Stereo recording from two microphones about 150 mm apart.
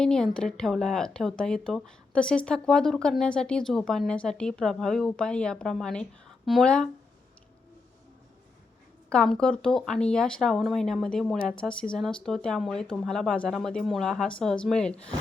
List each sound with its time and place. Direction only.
0.0 s speech: 5° left (ahead or behind)
9.0 s speech: 5° left (ahead or behind)